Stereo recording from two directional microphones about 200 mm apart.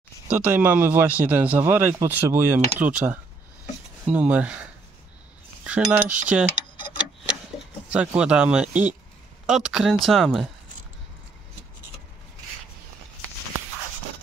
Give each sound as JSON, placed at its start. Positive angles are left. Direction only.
{"t": 0.3, "sound": "speech", "side_deg": -10}
{"t": 5.6, "sound": "speech", "side_deg": -5}
{"t": 7.9, "sound": "speech", "side_deg": -5}